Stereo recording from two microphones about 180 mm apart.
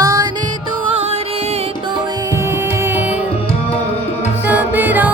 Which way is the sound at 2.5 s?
10° right (ahead or behind).